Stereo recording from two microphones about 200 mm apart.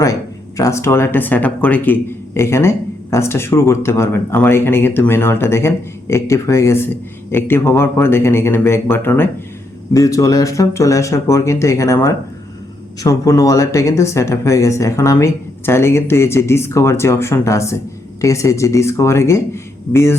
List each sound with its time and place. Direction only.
0.0 s speech: 15° left (ahead or behind)